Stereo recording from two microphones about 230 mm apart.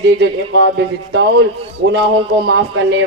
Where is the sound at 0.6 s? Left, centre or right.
Right.